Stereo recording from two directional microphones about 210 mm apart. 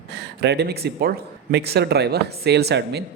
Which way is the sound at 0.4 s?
55° right (ahead or behind).